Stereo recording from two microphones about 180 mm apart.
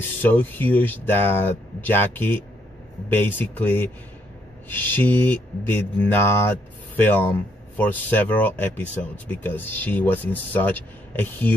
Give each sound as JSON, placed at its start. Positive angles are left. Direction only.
{"t": 0.2, "sound": "speech", "side_deg": 10}